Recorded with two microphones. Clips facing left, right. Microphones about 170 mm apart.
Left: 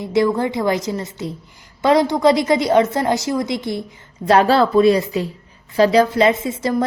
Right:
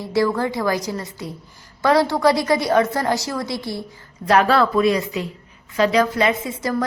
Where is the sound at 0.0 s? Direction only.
20° left (ahead or behind).